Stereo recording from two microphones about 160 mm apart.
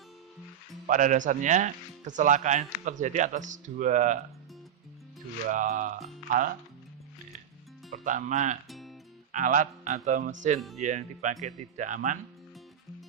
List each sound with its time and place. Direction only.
0.9 s speech: 55° right (ahead or behind)
5.5 s speech: 55° right (ahead or behind)
7.9 s speech: 50° right (ahead or behind)
8.6 s music: centre (ahead or behind)
9.3 s speech: 55° right (ahead or behind)